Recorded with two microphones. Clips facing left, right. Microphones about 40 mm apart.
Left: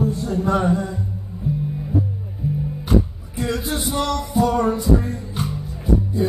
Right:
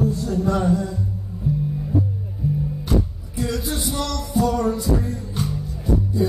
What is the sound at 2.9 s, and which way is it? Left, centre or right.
Music, left.